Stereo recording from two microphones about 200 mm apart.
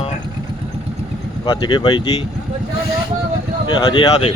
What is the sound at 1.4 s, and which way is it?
Speech, 25° left (ahead or behind).